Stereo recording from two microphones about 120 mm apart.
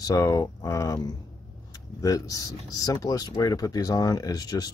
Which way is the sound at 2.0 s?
30° left (ahead or behind).